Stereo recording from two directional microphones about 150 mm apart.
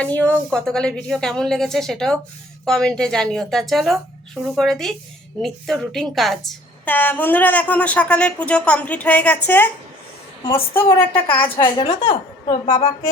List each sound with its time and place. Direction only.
0.0 s a woman's voice: 10° left (ahead or behind)
11.6 s a woman's voice: 30° left (ahead or behind)